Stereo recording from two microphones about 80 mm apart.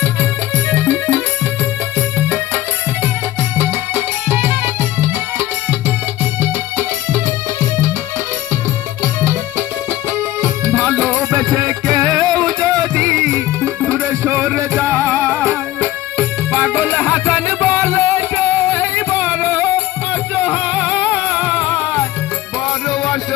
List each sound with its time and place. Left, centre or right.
0.0 s music: right
3.6 s music: right
10.2 s music: right
16.6 s music: right
20.7 s music: centre